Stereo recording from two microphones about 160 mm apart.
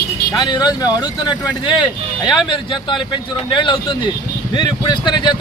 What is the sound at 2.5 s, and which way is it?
Speech, 30° left (ahead or behind).